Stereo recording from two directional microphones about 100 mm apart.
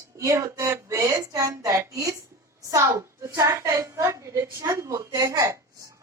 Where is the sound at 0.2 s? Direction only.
35° right (ahead or behind).